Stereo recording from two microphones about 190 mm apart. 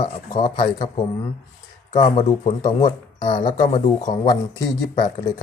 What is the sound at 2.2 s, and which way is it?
Speech, 40° left (ahead or behind).